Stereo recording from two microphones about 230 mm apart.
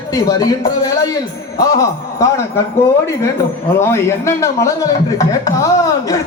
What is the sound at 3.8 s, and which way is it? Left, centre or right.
Speech, centre.